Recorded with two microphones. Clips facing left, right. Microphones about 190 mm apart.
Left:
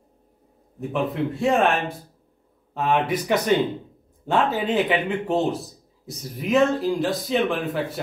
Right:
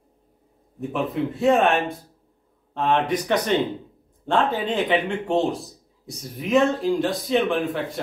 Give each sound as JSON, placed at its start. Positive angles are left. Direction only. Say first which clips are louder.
{"t": 0.7, "sound": "a man's voice", "louder": "even", "side_deg": 0}